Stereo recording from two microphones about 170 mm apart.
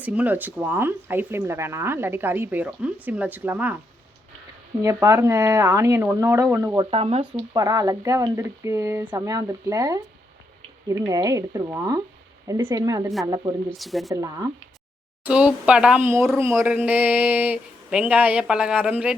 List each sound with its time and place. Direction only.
0.0 s speech: 10° right (ahead or behind)
4.8 s speech: 15° right (ahead or behind)
6.9 s speech: 35° right (ahead or behind)
11.1 s speech: 20° right (ahead or behind)
13.7 s speech: centre (ahead or behind)
14.1 s speech: 20° right (ahead or behind)
15.2 s speech: 5° right (ahead or behind)